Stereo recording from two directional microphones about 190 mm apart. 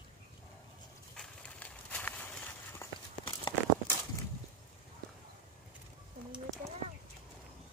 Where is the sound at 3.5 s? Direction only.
25° left (ahead or behind).